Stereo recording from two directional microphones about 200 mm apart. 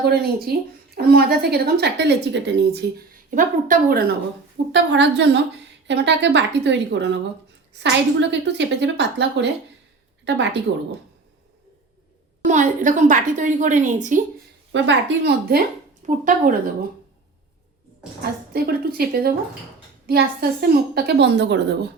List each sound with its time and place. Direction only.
0.0 s a woman's voice: 50° right (ahead or behind)
3.2 s a woman's voice: 40° right (ahead or behind)
4.7 s a woman's voice: 60° right (ahead or behind)
12.5 s a woman's voice: 40° right (ahead or behind)
14.7 s a woman's voice: 60° right (ahead or behind)
16.0 s a woman's voice: 40° right (ahead or behind)
18.2 s a woman's voice: 50° right (ahead or behind)